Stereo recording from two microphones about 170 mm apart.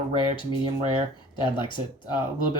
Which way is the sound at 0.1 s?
30° left (ahead or behind).